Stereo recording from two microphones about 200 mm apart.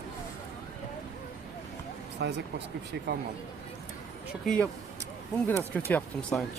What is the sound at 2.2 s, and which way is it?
Speech, 60° right (ahead or behind).